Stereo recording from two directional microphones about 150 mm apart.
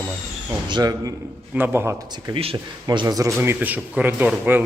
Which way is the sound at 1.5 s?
15° right (ahead or behind).